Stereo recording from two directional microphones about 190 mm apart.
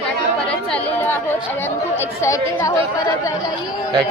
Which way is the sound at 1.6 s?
15° left (ahead or behind).